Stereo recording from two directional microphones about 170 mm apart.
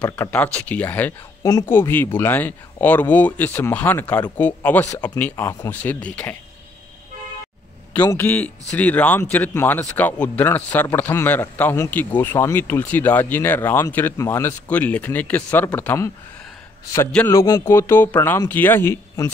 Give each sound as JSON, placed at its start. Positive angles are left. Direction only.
{"t": 0.1, "sound": "speech", "side_deg": 10}
{"t": 8.0, "sound": "a man's voice", "side_deg": 15}